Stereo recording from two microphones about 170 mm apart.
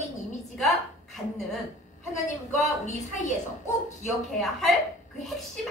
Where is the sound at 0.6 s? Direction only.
Centre (ahead or behind).